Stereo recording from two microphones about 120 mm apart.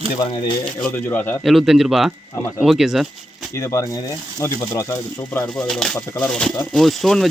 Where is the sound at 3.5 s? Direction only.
25° left (ahead or behind).